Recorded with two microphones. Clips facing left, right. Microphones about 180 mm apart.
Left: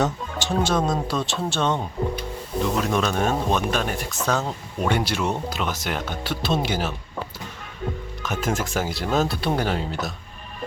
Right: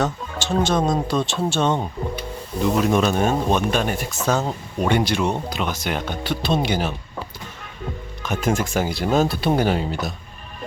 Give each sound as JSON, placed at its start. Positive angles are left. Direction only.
{"t": 0.5, "sound": "speech", "side_deg": 5}
{"t": 8.2, "sound": "speech", "side_deg": 5}